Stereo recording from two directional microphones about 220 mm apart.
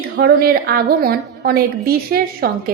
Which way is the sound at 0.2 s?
45° right (ahead or behind).